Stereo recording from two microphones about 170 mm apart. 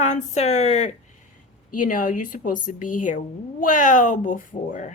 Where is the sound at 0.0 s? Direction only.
45° left (ahead or behind).